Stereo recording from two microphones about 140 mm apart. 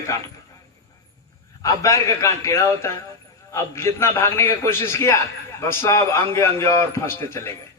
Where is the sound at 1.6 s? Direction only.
25° left (ahead or behind).